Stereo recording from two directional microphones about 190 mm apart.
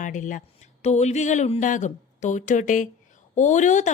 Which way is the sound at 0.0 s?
40° left (ahead or behind).